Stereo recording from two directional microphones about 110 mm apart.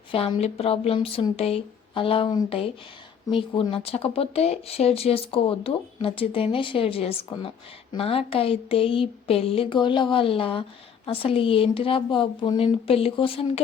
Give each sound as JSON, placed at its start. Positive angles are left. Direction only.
{"t": 0.1, "sound": "speech", "side_deg": 60}